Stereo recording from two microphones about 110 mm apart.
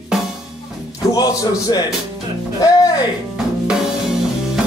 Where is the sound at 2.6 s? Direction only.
35° left (ahead or behind).